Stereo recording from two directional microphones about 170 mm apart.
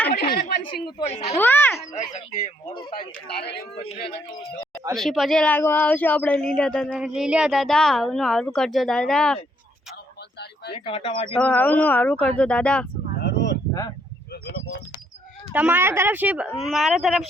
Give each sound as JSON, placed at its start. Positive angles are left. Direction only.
{"t": 0.1, "sound": "a sound", "side_deg": 65}
{"t": 0.6, "sound": "a woman's voice", "side_deg": 30}
{"t": 1.0, "sound": "speech", "side_deg": 40}
{"t": 1.4, "sound": "speech", "side_deg": 10}
{"t": 1.9, "sound": "speech", "side_deg": 45}
{"t": 3.3, "sound": "speech", "side_deg": 70}
{"t": 4.9, "sound": "a woman's voice", "side_deg": 0}
{"t": 10.8, "sound": "speech", "side_deg": 35}
{"t": 11.3, "sound": "speech", "side_deg": 10}
{"t": 13.1, "sound": "a sound", "side_deg": 85}
{"t": 15.5, "sound": "a woman's voice", "side_deg": -10}